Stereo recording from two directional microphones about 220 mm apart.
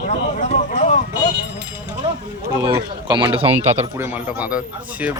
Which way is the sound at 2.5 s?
15° right (ahead or behind).